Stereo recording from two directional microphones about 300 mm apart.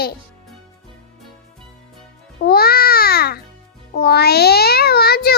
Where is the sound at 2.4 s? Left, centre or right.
Left.